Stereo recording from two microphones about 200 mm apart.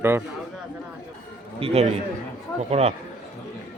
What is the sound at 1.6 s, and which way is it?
A man's voice, 30° right (ahead or behind).